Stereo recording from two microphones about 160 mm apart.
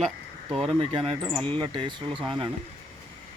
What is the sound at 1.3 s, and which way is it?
Speech, 10° left (ahead or behind).